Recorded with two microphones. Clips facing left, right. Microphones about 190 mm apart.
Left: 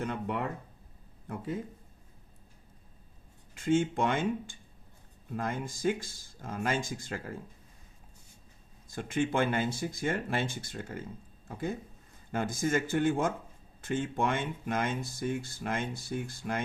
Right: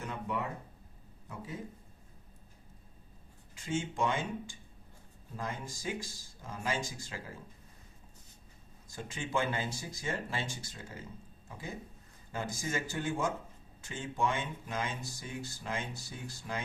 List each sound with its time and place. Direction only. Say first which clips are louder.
0.0 s speech: left 4 dB; 60° left (ahead or behind)
3.5 s speech: left 9 dB; 55° left (ahead or behind)
9.0 s speech: left 6 dB; 55° left (ahead or behind)